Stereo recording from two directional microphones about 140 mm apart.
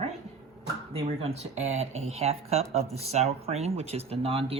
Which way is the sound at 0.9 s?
45° right (ahead or behind).